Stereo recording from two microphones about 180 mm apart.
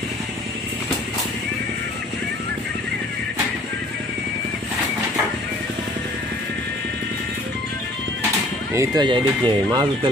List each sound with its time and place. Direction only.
8.7 s speech: 25° right (ahead or behind)